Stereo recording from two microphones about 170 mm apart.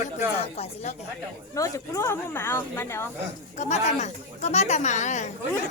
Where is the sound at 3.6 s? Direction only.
40° left (ahead or behind).